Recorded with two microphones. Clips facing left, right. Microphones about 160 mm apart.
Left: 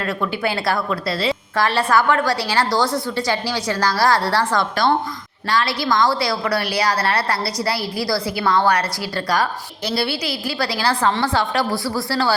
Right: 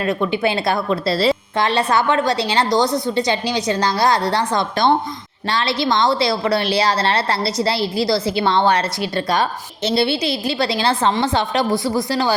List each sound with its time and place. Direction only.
0.0 s a woman's voice: 20° right (ahead or behind)
1.5 s a woman's voice: 20° right (ahead or behind)